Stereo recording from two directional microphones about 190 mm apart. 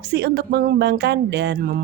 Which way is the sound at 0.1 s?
60° right (ahead or behind).